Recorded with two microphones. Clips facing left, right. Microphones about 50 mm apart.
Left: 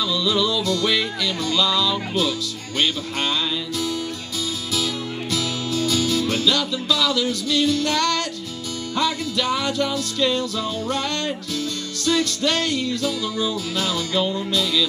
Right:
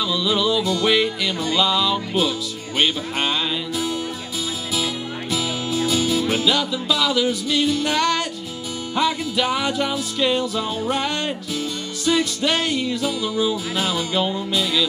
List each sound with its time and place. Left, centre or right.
0.1 s music: centre
5.3 s music: centre